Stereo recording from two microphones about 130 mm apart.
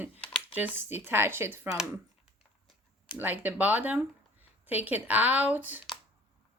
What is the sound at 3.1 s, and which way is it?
Speech, 15° right (ahead or behind).